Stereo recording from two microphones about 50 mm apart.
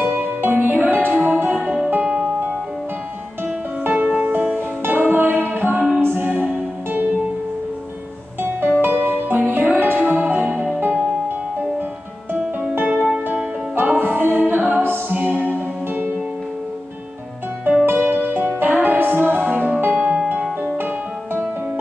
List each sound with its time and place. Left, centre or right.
0.1 s music: right
1.6 s music: centre
1.9 s music: right
3.8 s music: right
8.4 s music: right
9.9 s music: right
12.7 s music: right
13.0 s music: centre
13.7 s music: right
17.8 s music: right
20.7 s music: right